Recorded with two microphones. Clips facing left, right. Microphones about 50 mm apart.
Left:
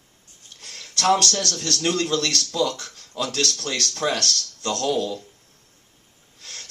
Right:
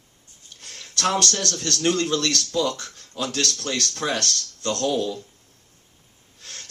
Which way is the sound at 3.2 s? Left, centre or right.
Right.